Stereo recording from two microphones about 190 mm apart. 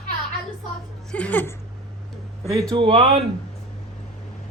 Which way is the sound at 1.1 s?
5° left (ahead or behind).